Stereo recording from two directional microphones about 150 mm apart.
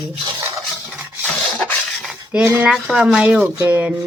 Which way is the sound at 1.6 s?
5° left (ahead or behind).